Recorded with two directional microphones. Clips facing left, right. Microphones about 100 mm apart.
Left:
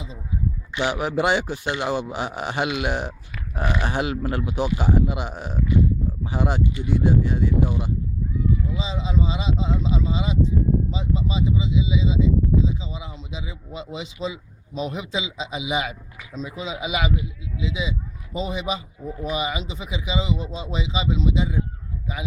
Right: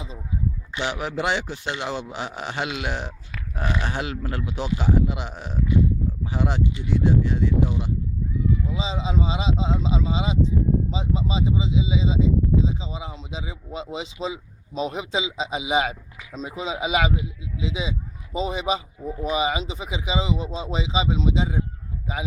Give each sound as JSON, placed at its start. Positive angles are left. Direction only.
{"t": 0.8, "sound": "speech", "side_deg": 10}
{"t": 8.7, "sound": "a man's voice", "side_deg": -25}